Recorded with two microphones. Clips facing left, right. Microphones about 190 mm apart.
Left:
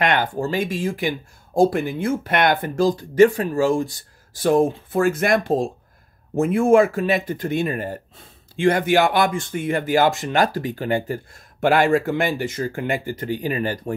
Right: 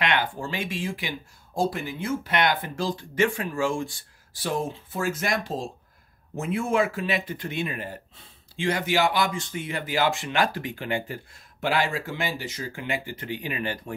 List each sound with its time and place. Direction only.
0.0 s speech: 45° left (ahead or behind)
11.6 s speech: 55° left (ahead or behind)